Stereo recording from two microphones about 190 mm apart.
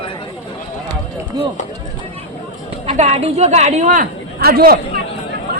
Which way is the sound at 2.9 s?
35° right (ahead or behind).